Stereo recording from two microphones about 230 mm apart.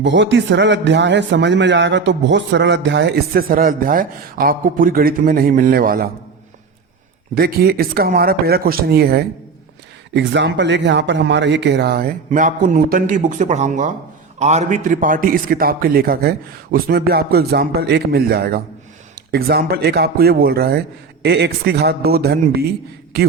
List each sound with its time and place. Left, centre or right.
0.0 s speech: right
7.3 s a man's voice: right